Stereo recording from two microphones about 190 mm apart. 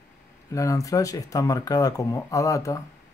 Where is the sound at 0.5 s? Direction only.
15° left (ahead or behind).